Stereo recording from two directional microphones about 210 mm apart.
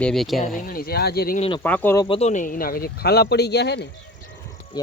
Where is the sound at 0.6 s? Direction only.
45° left (ahead or behind).